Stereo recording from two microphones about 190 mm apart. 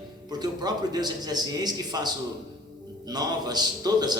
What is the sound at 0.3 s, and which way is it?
A man's voice, 20° right (ahead or behind).